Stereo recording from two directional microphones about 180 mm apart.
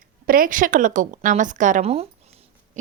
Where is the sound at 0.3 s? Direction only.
50° right (ahead or behind).